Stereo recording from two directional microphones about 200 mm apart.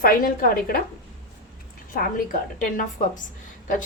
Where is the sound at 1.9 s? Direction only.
45° left (ahead or behind).